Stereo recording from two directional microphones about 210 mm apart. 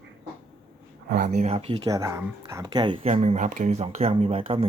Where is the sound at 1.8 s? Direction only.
15° right (ahead or behind).